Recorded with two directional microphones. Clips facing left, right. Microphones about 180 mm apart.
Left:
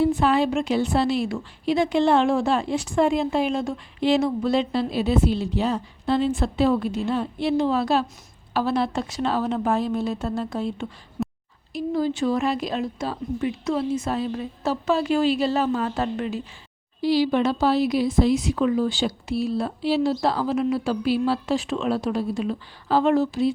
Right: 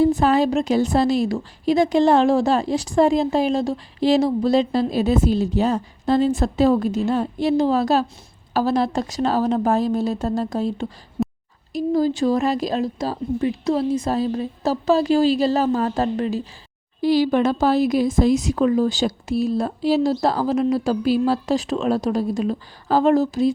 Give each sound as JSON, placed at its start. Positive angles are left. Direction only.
{"t": 0.0, "sound": "a woman's voice", "side_deg": -40}
{"t": 11.2, "sound": "a sound", "side_deg": -30}
{"t": 11.7, "sound": "a woman's voice", "side_deg": -40}
{"t": 17.0, "sound": "speech", "side_deg": -50}